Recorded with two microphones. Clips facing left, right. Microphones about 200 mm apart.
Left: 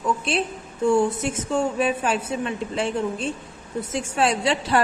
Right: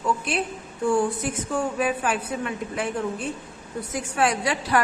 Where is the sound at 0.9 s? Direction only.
25° left (ahead or behind).